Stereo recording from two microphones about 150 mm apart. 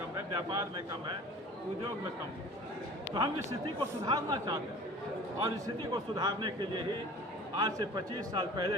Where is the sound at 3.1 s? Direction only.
30° right (ahead or behind).